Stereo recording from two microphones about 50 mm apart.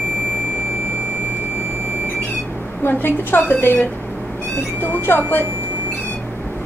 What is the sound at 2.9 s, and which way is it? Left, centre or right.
A woman's voice, left.